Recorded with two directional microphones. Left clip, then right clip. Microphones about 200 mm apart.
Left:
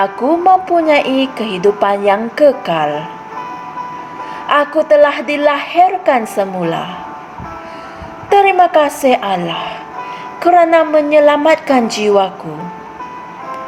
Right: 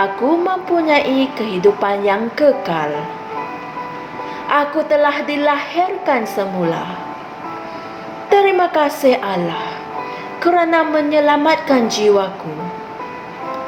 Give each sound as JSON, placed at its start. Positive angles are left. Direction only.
{"t": 0.0, "sound": "a woman's voice", "side_deg": 35}
{"t": 4.4, "sound": "a woman's voice", "side_deg": 40}
{"t": 8.4, "sound": "a woman's voice", "side_deg": 35}